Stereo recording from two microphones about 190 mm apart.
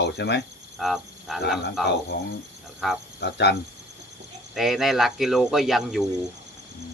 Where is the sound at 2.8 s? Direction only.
Centre (ahead or behind).